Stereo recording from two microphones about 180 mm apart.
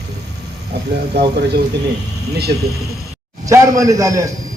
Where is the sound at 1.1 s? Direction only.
65° right (ahead or behind).